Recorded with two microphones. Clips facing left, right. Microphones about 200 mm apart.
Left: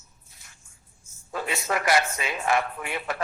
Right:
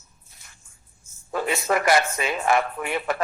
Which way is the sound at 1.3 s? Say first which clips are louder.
Right 5 dB; 55° right (ahead or behind).